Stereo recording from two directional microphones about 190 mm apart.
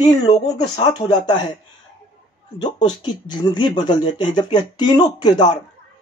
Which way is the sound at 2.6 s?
25° left (ahead or behind).